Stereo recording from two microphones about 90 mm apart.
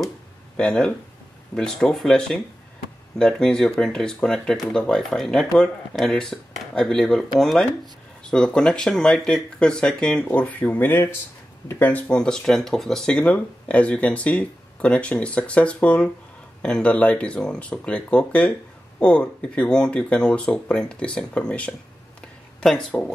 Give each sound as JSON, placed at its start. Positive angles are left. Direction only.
{"t": 0.6, "sound": "speech", "side_deg": 10}
{"t": 12.2, "sound": "speech", "side_deg": 5}